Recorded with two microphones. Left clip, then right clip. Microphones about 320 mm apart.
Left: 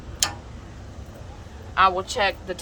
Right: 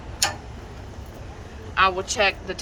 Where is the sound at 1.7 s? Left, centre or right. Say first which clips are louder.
Left 1 dB; centre.